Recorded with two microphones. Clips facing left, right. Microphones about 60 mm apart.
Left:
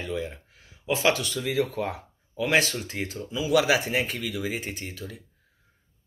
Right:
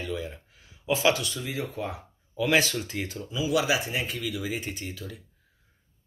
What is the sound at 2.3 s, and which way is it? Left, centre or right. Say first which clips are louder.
Speech: even; left.